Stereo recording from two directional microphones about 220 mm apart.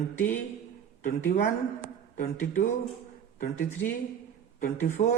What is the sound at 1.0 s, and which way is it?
Speech, 35° left (ahead or behind).